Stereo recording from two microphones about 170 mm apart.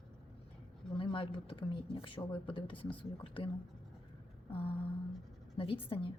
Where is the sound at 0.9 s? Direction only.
30° left (ahead or behind).